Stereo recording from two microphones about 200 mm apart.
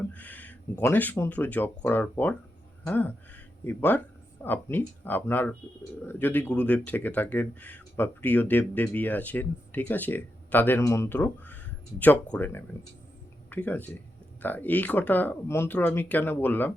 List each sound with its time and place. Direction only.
0.0 s speech: 10° left (ahead or behind)